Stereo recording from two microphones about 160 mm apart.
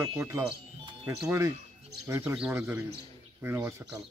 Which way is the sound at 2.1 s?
15° right (ahead or behind).